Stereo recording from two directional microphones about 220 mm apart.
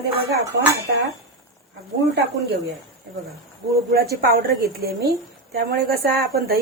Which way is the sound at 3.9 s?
45° right (ahead or behind).